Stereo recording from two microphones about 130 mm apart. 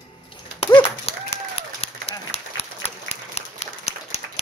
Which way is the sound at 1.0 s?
50° left (ahead or behind).